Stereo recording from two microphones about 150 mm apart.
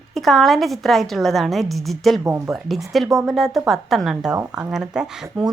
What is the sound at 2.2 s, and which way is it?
Speech, 15° right (ahead or behind).